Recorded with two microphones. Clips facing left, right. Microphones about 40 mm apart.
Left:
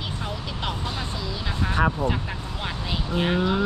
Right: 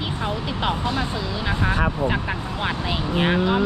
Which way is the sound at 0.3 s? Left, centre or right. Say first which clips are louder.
Right 8 dB; centre.